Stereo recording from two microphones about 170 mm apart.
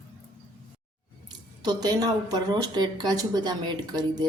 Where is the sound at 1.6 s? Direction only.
25° right (ahead or behind).